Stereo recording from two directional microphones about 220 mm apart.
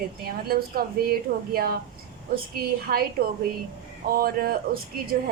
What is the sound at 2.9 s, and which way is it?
Speech, 40° right (ahead or behind).